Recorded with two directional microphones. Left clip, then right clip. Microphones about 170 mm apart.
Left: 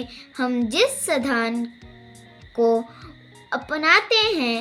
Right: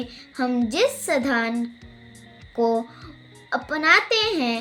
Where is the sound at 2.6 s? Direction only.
25° left (ahead or behind).